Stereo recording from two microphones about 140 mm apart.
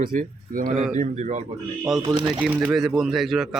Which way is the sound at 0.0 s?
75° right (ahead or behind).